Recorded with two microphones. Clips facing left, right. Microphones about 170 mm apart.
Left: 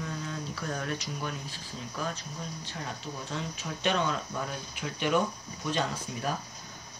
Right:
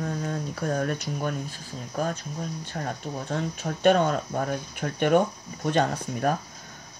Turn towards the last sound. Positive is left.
turn(degrees=-55)  # may be behind; listen again after turning